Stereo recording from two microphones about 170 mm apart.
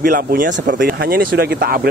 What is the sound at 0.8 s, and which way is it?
Speech, 60° right (ahead or behind).